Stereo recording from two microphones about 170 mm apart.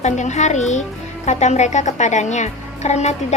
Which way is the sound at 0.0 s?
45° left (ahead or behind).